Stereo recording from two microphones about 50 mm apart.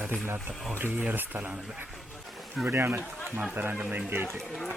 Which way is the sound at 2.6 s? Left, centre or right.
Right.